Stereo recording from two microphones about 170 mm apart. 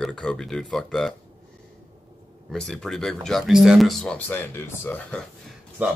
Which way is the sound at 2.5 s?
5° left (ahead or behind).